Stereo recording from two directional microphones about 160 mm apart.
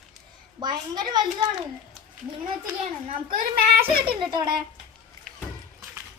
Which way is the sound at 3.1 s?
30° right (ahead or behind).